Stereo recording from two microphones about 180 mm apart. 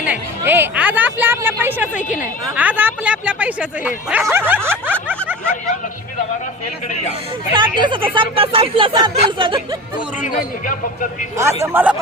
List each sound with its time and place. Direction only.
0.1 s a woman's voice: 10° right (ahead or behind)
2.0 s a man's voice: 45° left (ahead or behind)
2.6 s speech: 10° right (ahead or behind)
7.5 s speech: 25° right (ahead or behind)
10.3 s a man's voice: 50° left (ahead or behind)
11.6 s speech: 10° right (ahead or behind)